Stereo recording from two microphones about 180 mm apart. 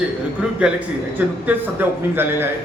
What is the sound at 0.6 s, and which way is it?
A man's voice, 5° right (ahead or behind).